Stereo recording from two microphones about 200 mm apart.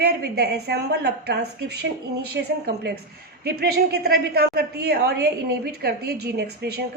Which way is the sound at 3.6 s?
55° right (ahead or behind).